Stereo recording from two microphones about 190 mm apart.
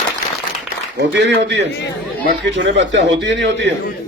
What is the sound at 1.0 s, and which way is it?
A man's voice, 65° right (ahead or behind).